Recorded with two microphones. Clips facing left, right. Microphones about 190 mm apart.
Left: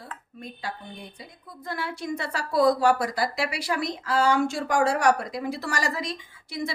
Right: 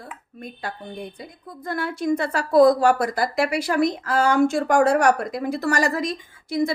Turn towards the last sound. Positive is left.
turn(degrees=-45)  # may be behind; listen again after turning